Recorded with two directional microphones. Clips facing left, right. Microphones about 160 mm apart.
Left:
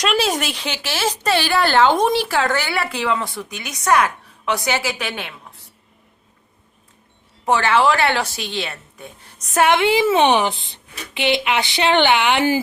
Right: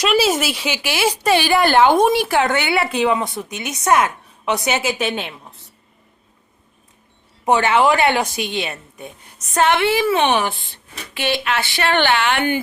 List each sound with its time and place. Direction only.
0.0 s speech: 5° right (ahead or behind); by 5.3 s 20° right (ahead or behind)
7.4 s speech: 20° right (ahead or behind)
9.6 s a woman's voice: 15° left (ahead or behind)